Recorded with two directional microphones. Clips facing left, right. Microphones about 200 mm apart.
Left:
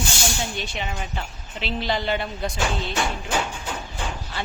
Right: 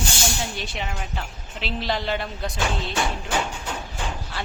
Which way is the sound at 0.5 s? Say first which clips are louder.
Left 1 dB; centre (ahead or behind).